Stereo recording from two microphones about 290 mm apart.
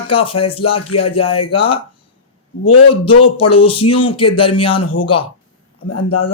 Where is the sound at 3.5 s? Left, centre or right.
Centre.